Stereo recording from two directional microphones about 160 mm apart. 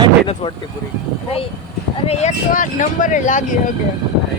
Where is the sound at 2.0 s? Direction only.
50° left (ahead or behind).